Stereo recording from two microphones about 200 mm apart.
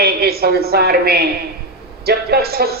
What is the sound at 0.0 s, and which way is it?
A woman's voice, 50° right (ahead or behind).